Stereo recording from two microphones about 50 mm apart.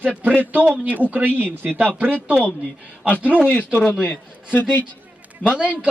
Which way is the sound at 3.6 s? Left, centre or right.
Left.